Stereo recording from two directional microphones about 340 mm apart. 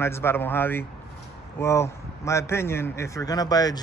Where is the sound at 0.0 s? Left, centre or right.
Centre.